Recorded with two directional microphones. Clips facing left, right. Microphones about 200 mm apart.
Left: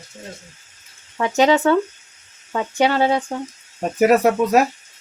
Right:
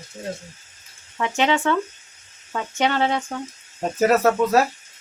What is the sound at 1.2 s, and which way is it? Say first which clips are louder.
Speech: left 5 dB; 40° left (ahead or behind).